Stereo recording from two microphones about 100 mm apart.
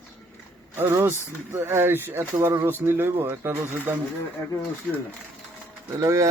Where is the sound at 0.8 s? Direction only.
30° right (ahead or behind).